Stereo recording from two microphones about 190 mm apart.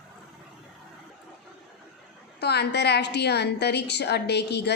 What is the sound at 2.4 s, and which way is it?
A woman's voice, 60° left (ahead or behind).